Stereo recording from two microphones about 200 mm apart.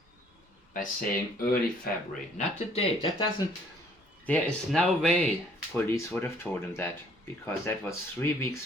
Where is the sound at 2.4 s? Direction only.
30° left (ahead or behind).